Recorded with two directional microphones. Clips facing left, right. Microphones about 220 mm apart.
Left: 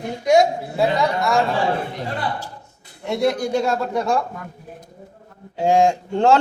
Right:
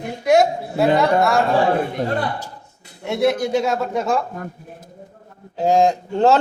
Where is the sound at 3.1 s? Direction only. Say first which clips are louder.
Right 2 dB; centre (ahead or behind).